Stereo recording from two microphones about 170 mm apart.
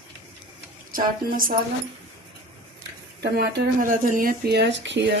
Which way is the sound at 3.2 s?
75° right (ahead or behind).